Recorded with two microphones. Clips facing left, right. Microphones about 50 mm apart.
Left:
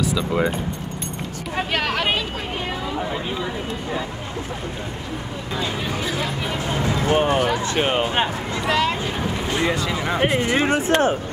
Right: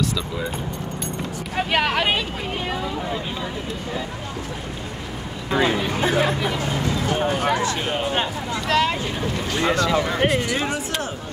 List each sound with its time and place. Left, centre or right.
1.7 s speech: centre
5.9 s speech: right
6.8 s speech: left
8.6 s speech: centre
9.2 s speech: centre
10.4 s speech: left